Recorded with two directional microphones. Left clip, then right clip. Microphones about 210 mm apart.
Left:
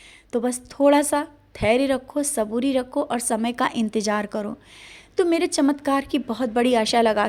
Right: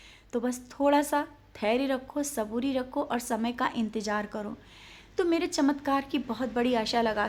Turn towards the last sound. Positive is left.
turn(degrees=30)  # may be behind; listen again after turning